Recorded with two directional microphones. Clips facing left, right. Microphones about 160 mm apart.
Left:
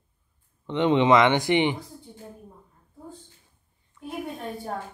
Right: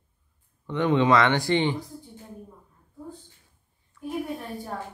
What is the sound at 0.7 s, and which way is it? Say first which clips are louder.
Speech: left 2 dB; 20° left (ahead or behind).